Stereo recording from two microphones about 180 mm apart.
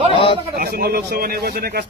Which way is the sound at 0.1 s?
30° left (ahead or behind).